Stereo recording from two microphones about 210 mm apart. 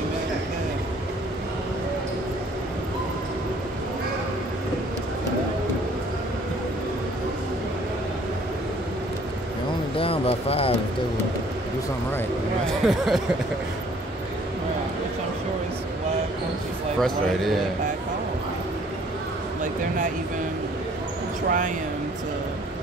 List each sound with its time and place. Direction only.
9.9 s a sound: 25° left (ahead or behind)
12.6 s speech: centre (ahead or behind)
17.0 s speech: centre (ahead or behind)
21.5 s speech: 40° right (ahead or behind)